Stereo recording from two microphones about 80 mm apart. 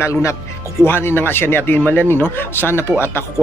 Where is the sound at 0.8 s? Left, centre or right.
Left.